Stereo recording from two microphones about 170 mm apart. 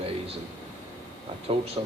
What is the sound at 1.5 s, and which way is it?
Speech, 35° right (ahead or behind).